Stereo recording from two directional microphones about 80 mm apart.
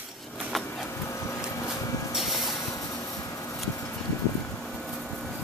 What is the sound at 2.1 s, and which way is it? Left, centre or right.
Vehicle, centre.